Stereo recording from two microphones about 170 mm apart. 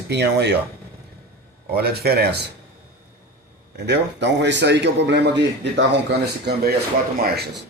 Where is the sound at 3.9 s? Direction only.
90° right.